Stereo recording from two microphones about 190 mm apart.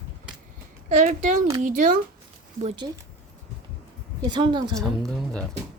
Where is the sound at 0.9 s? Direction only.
40° right (ahead or behind).